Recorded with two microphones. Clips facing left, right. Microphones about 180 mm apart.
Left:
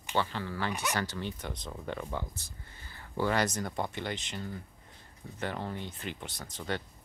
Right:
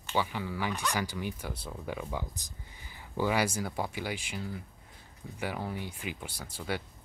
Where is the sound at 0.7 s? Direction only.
10° left (ahead or behind).